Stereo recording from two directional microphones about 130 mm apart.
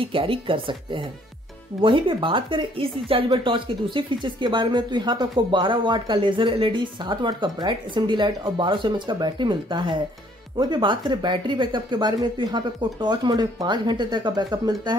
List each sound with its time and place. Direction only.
0.0 s speech: 45° right (ahead or behind)